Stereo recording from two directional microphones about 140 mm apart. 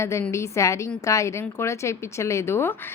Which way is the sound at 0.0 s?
20° left (ahead or behind).